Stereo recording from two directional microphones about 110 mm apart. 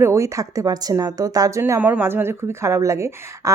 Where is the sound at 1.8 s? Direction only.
15° right (ahead or behind).